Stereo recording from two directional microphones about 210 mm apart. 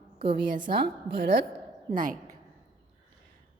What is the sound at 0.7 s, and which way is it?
Speech, 45° right (ahead or behind).